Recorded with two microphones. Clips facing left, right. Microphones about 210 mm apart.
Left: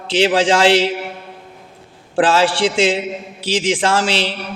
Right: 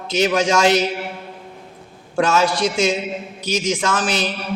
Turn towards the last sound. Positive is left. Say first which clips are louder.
# left 3 dB
turn(degrees=30)  # may be behind; listen again after turning